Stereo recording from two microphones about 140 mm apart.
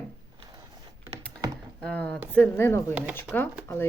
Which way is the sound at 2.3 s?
15° left (ahead or behind).